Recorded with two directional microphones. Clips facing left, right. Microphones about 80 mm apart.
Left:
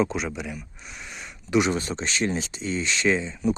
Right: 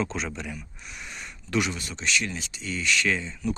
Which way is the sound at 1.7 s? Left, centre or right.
Left.